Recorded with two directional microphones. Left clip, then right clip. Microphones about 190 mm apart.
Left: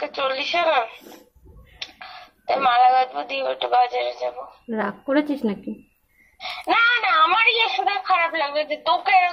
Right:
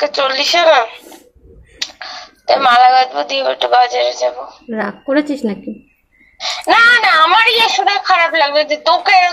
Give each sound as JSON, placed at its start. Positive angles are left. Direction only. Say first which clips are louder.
{"t": 0.0, "sound": "speech", "louder": "right 10 dB", "side_deg": -20}
{"t": 1.8, "sound": "a sound", "louder": "right 11 dB", "side_deg": -20}
{"t": 4.6, "sound": "a woman's voice", "louder": "right 6 dB", "side_deg": 10}
{"t": 6.3, "sound": "speech", "louder": "right 9 dB", "side_deg": -20}